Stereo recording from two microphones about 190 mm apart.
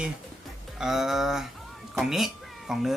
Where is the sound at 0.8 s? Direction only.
Centre (ahead or behind).